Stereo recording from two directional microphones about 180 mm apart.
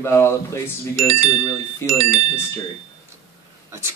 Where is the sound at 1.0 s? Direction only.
35° right (ahead or behind).